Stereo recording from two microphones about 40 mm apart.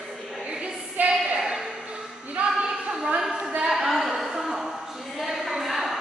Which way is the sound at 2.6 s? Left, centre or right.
Right.